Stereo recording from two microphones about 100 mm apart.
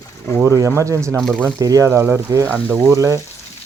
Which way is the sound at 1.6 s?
35° right (ahead or behind).